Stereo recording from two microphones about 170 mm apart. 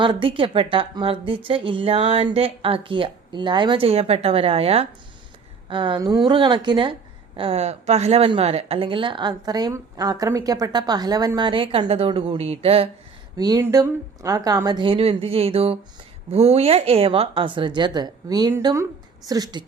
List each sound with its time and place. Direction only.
0.0 s a woman's voice: 30° right (ahead or behind)
13.3 s speech: 25° right (ahead or behind)